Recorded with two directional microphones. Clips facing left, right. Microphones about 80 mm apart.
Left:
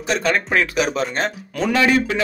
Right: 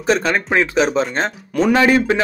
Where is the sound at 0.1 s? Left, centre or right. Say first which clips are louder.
Right 3 dB; right.